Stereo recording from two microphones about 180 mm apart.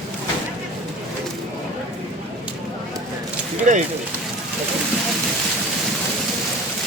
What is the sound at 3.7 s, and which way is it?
Speech, 40° right (ahead or behind).